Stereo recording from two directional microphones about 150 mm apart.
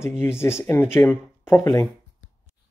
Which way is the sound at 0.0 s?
15° left (ahead or behind).